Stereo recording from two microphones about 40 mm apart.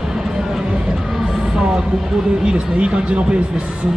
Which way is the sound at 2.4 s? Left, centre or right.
Right.